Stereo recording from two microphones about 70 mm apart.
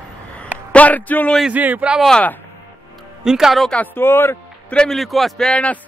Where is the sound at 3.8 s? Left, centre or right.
Left.